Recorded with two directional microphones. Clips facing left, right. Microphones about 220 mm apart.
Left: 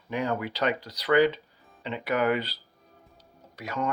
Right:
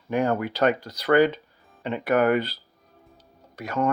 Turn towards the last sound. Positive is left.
turn(degrees=-50)  # may be behind; listen again after turning